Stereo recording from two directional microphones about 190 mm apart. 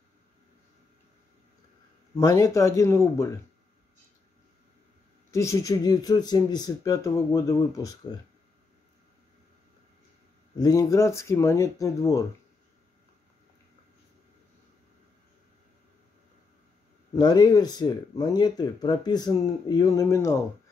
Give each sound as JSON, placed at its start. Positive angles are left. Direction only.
{"t": 2.1, "sound": "speech", "side_deg": 15}
{"t": 5.3, "sound": "speech", "side_deg": 15}
{"t": 10.6, "sound": "speech", "side_deg": 15}
{"t": 17.1, "sound": "speech", "side_deg": 20}